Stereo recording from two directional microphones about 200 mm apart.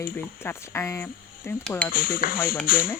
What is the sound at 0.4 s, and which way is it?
Speech, 10° left (ahead or behind).